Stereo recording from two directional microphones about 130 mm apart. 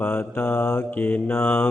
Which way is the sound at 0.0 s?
15° left (ahead or behind).